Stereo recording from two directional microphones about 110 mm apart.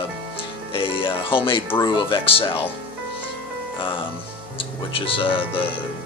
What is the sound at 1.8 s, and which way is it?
Speech, 40° left (ahead or behind).